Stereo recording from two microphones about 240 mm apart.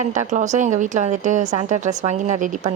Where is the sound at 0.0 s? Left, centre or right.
Right.